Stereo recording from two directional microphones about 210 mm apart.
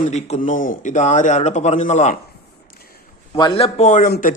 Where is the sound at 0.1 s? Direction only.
30° left (ahead or behind).